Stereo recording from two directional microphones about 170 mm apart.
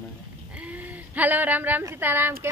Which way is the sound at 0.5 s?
10° right (ahead or behind).